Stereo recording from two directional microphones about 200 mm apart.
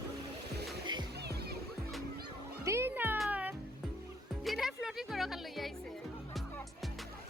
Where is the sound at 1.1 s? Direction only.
55° right (ahead or behind).